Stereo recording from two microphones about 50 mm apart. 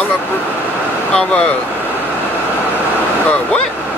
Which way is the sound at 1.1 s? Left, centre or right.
Left.